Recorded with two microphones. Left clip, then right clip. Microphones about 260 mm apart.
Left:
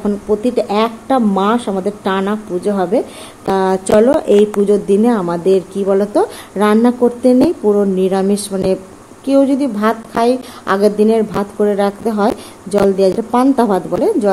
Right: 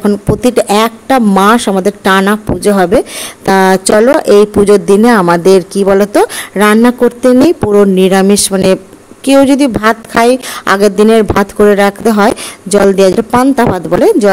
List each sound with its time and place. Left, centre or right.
0.0 s a woman's voice: right